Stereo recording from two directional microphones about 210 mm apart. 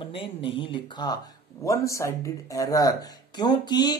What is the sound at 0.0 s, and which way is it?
Speech, 25° left (ahead or behind).